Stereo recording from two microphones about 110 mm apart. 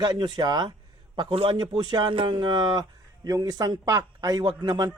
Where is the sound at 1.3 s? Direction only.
55° right (ahead or behind).